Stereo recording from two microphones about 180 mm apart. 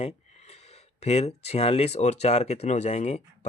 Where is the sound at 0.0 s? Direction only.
35° left (ahead or behind).